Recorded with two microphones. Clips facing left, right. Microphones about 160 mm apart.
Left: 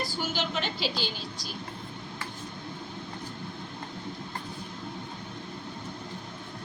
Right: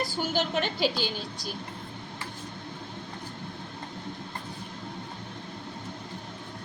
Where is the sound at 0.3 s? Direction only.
50° right (ahead or behind).